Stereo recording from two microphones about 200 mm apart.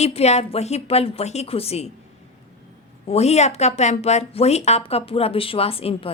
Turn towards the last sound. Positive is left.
turn(degrees=30)  # may be behind; listen again after turning